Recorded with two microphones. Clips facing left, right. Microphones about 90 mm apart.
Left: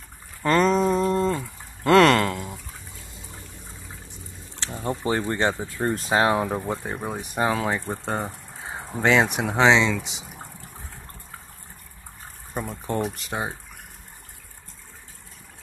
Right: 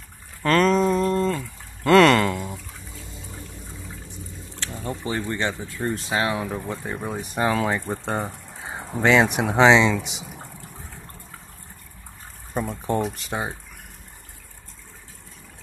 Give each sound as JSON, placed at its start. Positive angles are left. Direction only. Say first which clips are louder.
{"t": 0.4, "sound": "a sound", "louder": "right 1 dB", "side_deg": 10}
{"t": 4.7, "sound": "speech", "louder": "left 3 dB", "side_deg": 35}
{"t": 7.0, "sound": "speech", "louder": "right 3 dB", "side_deg": 5}
{"t": 12.5, "sound": "speech", "louder": "right 3 dB", "side_deg": -5}